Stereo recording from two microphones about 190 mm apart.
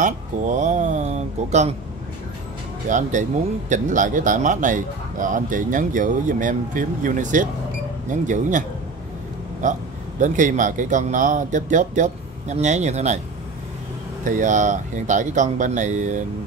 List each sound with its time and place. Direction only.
0.0 s speech: 40° right (ahead or behind)
2.9 s a man's voice: 40° right (ahead or behind)
14.2 s a man's voice: 40° right (ahead or behind)